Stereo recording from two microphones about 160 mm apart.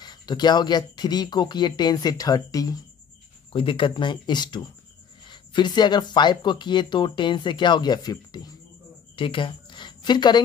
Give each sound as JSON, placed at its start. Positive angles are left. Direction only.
{"t": 0.0, "sound": "speech", "side_deg": 25}